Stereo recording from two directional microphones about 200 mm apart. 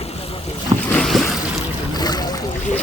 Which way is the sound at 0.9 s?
5° left (ahead or behind).